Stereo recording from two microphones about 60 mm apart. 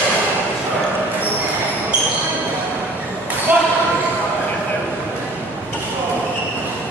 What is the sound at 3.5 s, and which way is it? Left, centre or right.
Basketball bounce, right.